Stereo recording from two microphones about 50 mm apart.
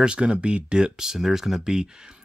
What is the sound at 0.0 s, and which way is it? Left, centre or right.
Speech, right.